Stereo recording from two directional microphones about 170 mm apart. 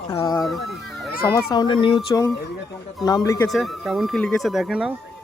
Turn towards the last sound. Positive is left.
turn(degrees=-5)  # may be behind; listen again after turning